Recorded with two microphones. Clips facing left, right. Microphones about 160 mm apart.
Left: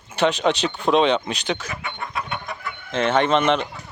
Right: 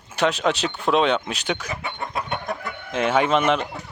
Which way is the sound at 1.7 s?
35° right (ahead or behind).